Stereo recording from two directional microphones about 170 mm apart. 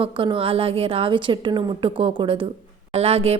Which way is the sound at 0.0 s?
30° right (ahead or behind).